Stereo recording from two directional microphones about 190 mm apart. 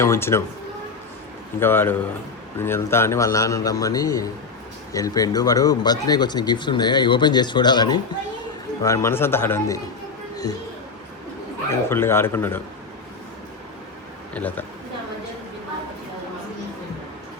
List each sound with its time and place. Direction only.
0.0 s a man's voice: 15° left (ahead or behind)
1.5 s a man's voice: 10° left (ahead or behind)
10.3 s a sound: 20° left (ahead or behind)
11.7 s a man's voice: 15° left (ahead or behind)
14.3 s a man's voice: 10° left (ahead or behind)